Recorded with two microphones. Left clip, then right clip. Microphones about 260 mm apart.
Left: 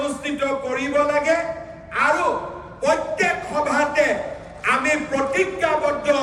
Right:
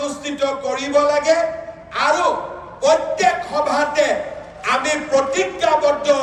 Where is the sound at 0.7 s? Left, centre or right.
Right.